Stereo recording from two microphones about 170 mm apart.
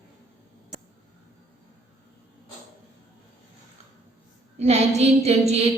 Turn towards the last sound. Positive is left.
turn(degrees=-40)  # may be behind; listen again after turning